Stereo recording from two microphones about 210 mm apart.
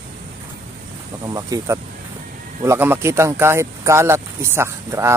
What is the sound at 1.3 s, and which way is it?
Speech, 15° right (ahead or behind).